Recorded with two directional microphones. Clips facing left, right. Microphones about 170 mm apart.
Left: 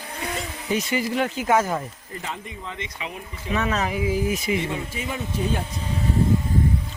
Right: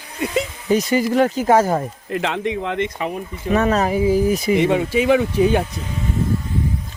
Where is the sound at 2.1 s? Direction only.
80° right; by 4.5 s 35° right (ahead or behind).